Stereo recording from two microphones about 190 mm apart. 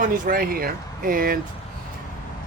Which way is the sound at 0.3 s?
50° right (ahead or behind).